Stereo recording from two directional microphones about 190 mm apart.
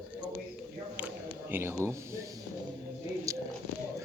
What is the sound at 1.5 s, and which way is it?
Speech, 10° right (ahead or behind).